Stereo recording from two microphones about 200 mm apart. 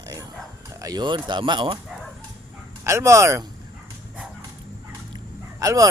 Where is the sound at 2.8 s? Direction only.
15° right (ahead or behind).